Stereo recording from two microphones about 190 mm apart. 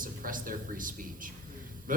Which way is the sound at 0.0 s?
45° right (ahead or behind).